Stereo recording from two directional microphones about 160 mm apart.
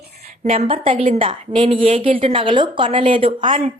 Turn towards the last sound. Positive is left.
turn(degrees=-30)  # may be behind; listen again after turning